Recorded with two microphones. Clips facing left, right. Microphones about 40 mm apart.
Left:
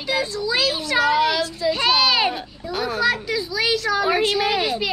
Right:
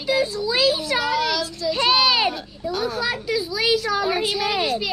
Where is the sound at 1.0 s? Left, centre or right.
Centre.